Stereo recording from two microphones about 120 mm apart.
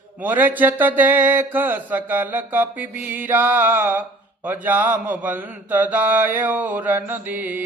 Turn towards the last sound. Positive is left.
turn(degrees=-15)  # may be behind; listen again after turning